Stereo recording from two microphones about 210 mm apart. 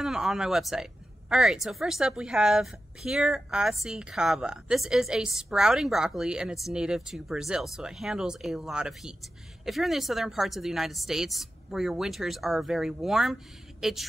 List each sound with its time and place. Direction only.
0.0 s a woman's voice: centre (ahead or behind)